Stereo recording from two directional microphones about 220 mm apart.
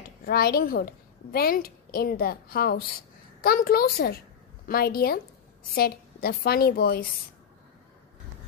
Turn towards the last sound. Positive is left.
turn(degrees=45)  # may be behind; listen again after turning